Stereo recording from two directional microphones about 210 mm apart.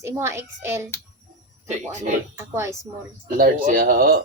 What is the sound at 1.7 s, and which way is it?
Speech, 35° right (ahead or behind).